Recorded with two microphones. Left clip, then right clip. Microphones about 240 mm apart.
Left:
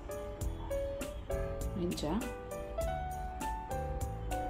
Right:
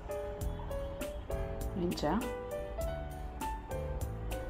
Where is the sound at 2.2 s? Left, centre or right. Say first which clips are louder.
Right 3 dB; centre.